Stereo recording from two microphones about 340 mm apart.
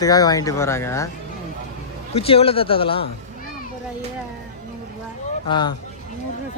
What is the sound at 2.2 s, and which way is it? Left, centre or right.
Speech, centre.